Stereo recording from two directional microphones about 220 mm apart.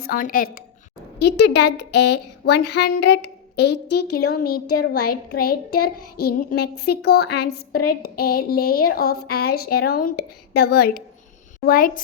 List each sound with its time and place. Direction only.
0.0 s a woman's voice: 40° left (ahead or behind)
1.2 s child singing: 50° left (ahead or behind)
11.6 s a woman's voice: 40° left (ahead or behind)